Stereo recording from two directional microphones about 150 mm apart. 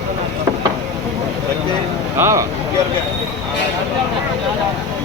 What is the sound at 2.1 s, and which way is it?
Speech, 20° right (ahead or behind).